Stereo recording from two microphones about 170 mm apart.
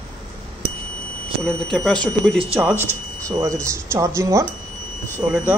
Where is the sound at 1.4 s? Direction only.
5° left (ahead or behind).